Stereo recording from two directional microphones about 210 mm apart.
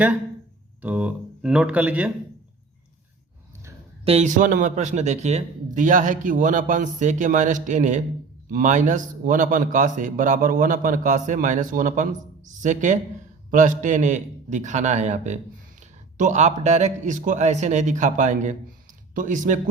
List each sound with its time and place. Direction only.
0.8 s speech: 5° right (ahead or behind)
4.0 s speech: 30° right (ahead or behind)